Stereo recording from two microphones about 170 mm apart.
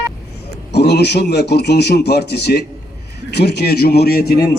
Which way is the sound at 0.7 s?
75° left (ahead or behind).